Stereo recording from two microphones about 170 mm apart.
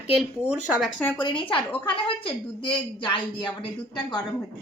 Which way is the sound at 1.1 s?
30° left (ahead or behind).